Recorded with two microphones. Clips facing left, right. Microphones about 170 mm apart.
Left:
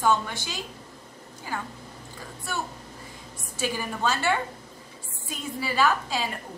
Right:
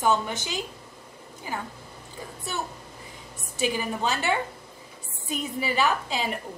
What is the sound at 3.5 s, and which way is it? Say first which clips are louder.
Speech: right 3 dB; 15° right (ahead or behind).